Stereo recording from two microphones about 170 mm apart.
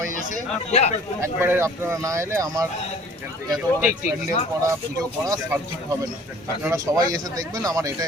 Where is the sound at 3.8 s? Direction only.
10° right (ahead or behind).